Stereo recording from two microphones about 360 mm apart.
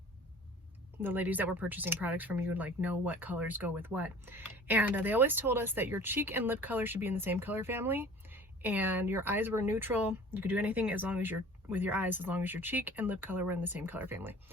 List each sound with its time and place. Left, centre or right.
1.0 s speech: centre